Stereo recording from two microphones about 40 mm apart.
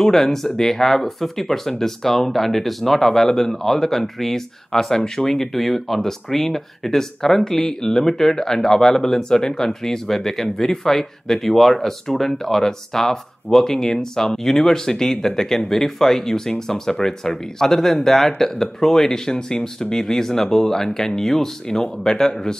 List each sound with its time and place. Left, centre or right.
0.0 s speech: centre